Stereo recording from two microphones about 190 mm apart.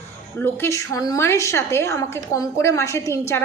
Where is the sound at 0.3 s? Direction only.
10° left (ahead or behind).